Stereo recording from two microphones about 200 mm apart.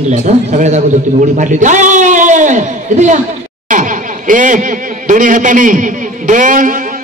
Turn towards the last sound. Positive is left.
turn(degrees=-40)  # may be behind; listen again after turning